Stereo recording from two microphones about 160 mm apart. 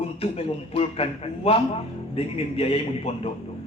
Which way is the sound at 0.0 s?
40° left (ahead or behind).